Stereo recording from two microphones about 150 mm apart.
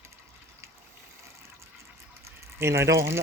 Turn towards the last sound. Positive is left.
turn(degrees=-15)  # may be behind; listen again after turning